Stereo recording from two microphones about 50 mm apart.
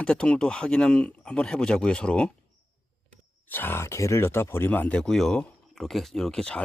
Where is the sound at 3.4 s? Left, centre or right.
Left.